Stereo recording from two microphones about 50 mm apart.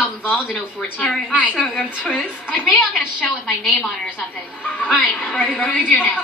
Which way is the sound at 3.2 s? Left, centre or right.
Centre.